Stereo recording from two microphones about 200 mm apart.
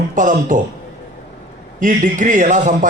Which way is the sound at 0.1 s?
40° right (ahead or behind).